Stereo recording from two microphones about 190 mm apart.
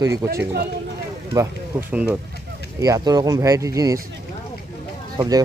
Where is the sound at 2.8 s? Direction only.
20° right (ahead or behind).